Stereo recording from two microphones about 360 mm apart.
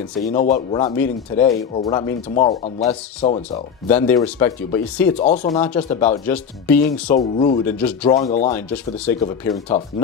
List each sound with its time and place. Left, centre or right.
0.2 s speech: centre
0.8 s speech: centre
3.9 s speech: centre
5.2 s speech: left
6.2 s speech: centre
7.6 s speech: centre
8.1 s speech: centre
8.6 s speech: centre